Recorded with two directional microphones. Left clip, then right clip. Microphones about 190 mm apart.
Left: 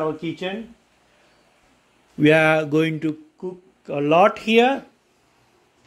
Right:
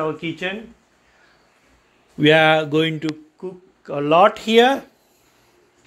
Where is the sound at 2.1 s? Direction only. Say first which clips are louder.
Right 2 dB; 15° left (ahead or behind).